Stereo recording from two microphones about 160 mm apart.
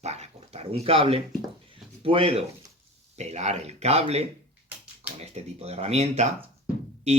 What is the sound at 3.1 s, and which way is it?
Speech, 45° right (ahead or behind).